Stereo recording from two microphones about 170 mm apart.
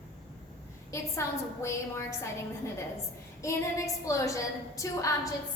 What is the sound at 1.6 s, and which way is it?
Speech, 15° left (ahead or behind).